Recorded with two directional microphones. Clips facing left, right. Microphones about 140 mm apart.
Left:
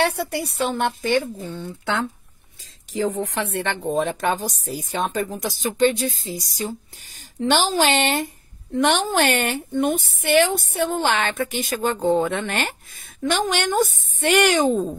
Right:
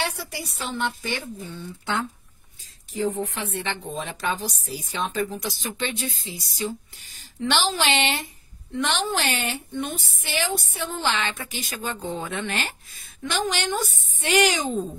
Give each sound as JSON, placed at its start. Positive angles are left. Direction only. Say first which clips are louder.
{"t": 0.0, "sound": "speech", "louder": "left 8 dB", "side_deg": 60}
{"t": 2.6, "sound": "speech", "louder": "left 3 dB", "side_deg": 90}